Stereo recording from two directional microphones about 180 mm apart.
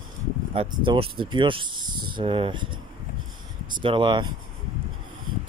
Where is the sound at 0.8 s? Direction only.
30° right (ahead or behind).